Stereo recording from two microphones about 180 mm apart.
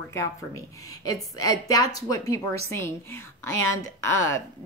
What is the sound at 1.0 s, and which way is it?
A woman's voice, 20° left (ahead or behind).